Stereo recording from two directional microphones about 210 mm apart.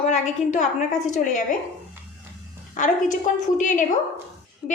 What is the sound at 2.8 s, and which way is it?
A woman's voice, 35° left (ahead or behind).